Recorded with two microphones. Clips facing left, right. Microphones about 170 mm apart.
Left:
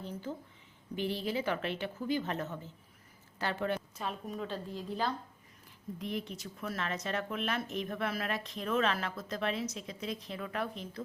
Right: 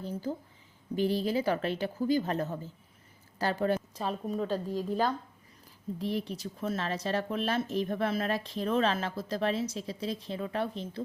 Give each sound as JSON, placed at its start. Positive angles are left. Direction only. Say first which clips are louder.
{"t": 0.0, "sound": "a woman's voice", "louder": "right 5 dB", "side_deg": -35}
{"t": 6.0, "sound": "speech", "louder": "right 5 dB", "side_deg": -35}